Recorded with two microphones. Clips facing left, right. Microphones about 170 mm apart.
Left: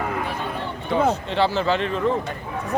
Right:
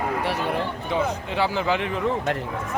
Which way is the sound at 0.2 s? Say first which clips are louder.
Right 3 dB; 75° right (ahead or behind).